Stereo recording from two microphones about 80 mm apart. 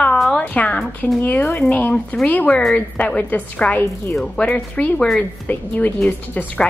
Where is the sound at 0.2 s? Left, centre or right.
Centre.